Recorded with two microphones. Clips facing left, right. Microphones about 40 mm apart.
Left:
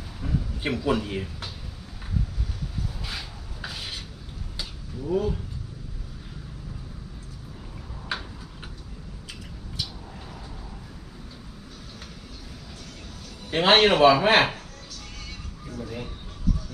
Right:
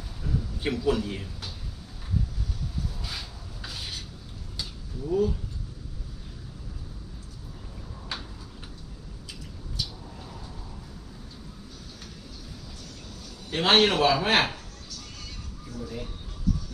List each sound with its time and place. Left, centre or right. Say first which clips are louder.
0.2 s a man's voice: left 2 dB; left
3.0 s a sound: left 2 dB; left
8.1 s tick-tock: left 5 dB; centre
13.5 s a man's voice: left 3 dB; left
14.9 s music: left 1 dB; left